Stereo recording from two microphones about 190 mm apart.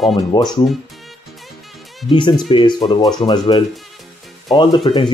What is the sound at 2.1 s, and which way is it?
Speech, 25° left (ahead or behind).